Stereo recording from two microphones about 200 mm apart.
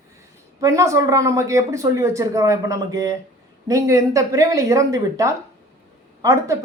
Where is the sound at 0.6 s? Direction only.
15° right (ahead or behind).